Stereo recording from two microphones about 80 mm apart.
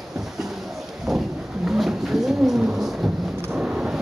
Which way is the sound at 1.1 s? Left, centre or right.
Centre.